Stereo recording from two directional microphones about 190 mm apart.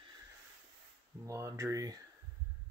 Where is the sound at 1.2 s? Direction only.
15° right (ahead or behind).